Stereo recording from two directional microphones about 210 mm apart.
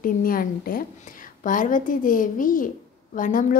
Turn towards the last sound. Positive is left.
turn(degrees=40)  # may be behind; listen again after turning